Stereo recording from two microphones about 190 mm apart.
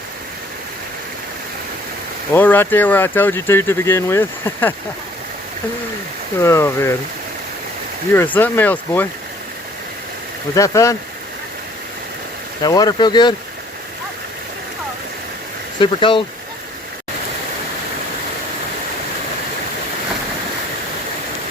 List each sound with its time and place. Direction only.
2.3 s speech: 10° left (ahead or behind)
6.4 s speech: 15° left (ahead or behind)
8.1 s speech: 10° left (ahead or behind)
10.5 s speech: 15° left (ahead or behind)
12.6 s speech: 20° left (ahead or behind)
15.8 s speech: 25° left (ahead or behind)